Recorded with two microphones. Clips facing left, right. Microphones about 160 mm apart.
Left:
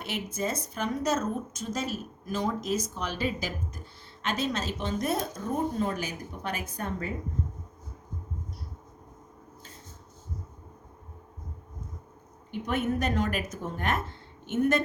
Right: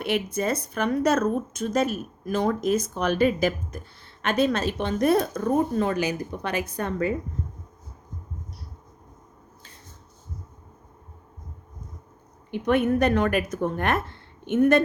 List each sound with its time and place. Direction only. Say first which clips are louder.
0.0 s a woman's voice: right 7 dB; 65° right (ahead or behind); by 7.1 s 80° right
12.5 s a woman's voice: right 7 dB; 65° right (ahead or behind)